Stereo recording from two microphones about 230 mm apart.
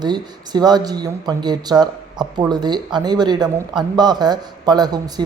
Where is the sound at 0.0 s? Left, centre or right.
Centre.